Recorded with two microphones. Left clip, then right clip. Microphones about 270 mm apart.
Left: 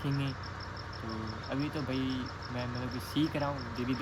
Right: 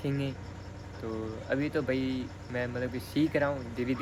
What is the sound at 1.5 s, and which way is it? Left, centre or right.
Speech, centre.